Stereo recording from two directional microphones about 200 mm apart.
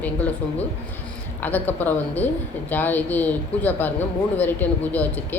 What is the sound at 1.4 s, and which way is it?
Speech, 10° left (ahead or behind).